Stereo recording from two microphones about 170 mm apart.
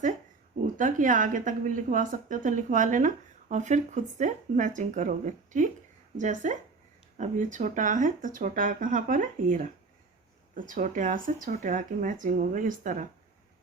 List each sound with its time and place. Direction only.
0.8 s speech: 50° right (ahead or behind)